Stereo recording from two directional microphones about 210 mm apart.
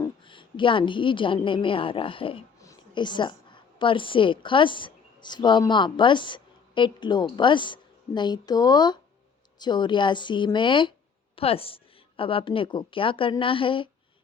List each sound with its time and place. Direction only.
0.0 s a woman's voice: 25° left (ahead or behind)